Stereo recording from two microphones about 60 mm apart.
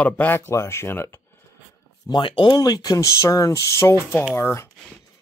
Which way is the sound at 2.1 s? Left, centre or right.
Left.